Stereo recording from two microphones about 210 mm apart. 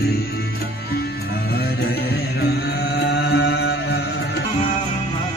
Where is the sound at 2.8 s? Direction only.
50° left (ahead or behind).